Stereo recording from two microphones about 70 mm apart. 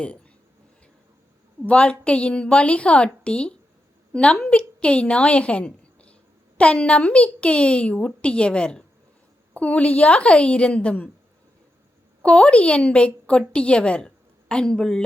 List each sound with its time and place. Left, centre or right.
1.6 s a woman's voice: centre
12.2 s a woman's voice: centre